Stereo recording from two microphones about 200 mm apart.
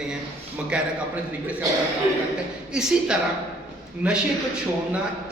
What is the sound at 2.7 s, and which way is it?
A man's voice, 5° right (ahead or behind).